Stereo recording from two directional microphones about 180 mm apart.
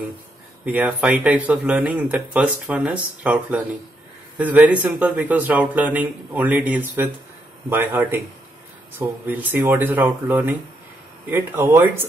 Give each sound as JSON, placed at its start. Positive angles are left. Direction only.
{"t": 0.7, "sound": "speech", "side_deg": -10}